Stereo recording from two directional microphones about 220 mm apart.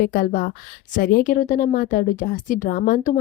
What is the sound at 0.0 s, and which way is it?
Speech, 40° left (ahead or behind).